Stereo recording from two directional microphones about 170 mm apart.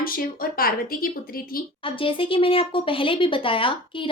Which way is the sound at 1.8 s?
30° left (ahead or behind).